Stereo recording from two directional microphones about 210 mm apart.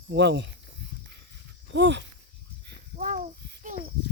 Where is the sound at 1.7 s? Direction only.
55° right (ahead or behind).